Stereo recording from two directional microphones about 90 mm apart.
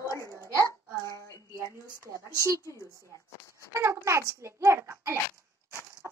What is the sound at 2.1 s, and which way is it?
Speech, 40° right (ahead or behind).